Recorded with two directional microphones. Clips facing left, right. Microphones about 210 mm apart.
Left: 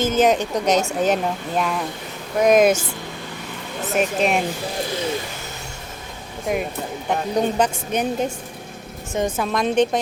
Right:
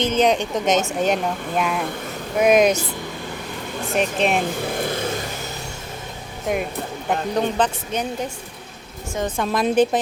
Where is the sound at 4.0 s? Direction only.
Centre (ahead or behind).